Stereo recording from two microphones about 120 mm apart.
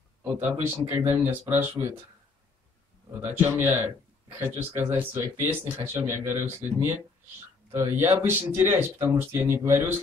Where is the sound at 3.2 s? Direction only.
20° right (ahead or behind).